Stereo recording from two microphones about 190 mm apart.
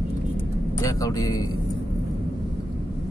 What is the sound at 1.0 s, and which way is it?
Speech, 20° left (ahead or behind).